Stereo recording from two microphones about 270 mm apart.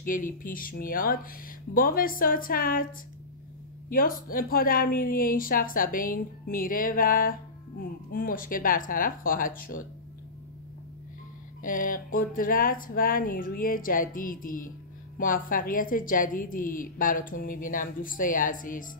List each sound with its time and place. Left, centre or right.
0.0 s a woman's voice: left
3.9 s a woman's voice: left
11.6 s a woman's voice: left